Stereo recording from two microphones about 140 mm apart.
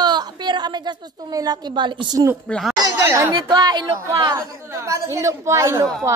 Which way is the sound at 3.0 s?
15° right (ahead or behind).